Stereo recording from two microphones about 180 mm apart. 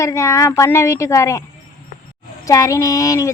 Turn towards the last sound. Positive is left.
turn(degrees=20)  # may be behind; listen again after turning